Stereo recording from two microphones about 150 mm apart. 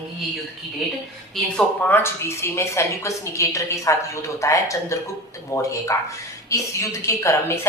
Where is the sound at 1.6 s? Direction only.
15° left (ahead or behind).